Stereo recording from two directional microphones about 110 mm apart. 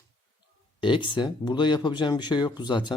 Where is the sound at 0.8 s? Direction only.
50° left (ahead or behind).